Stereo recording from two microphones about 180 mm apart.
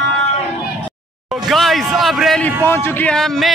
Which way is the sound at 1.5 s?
Centre (ahead or behind).